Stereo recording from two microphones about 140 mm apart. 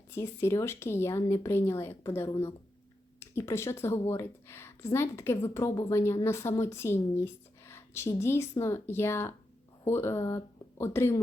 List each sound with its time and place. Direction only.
0.1 s a woman's voice: 15° left (ahead or behind)